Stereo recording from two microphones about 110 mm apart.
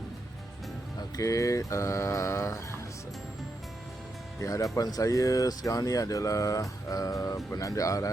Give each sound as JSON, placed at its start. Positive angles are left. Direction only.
{"t": 0.9, "sound": "mantra", "side_deg": 30}
{"t": 4.4, "sound": "speech", "side_deg": 30}